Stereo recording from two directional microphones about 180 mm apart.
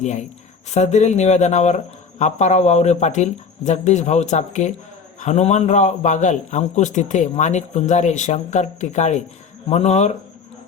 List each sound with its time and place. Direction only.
0.7 s speech: 40° left (ahead or behind)